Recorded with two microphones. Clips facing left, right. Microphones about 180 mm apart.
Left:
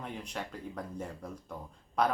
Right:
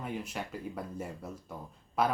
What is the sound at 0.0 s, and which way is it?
Speech, 5° right (ahead or behind).